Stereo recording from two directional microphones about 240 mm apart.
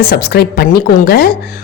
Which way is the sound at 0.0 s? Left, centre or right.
Left.